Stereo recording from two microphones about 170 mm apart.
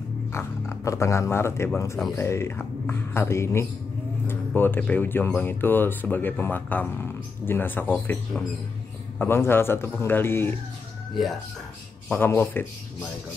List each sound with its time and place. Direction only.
0.3 s speech: 15° left (ahead or behind)
9.2 s speech: 15° left (ahead or behind)
12.1 s speech: 10° left (ahead or behind)